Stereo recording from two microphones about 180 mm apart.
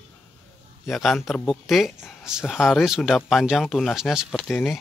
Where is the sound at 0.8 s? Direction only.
Centre (ahead or behind).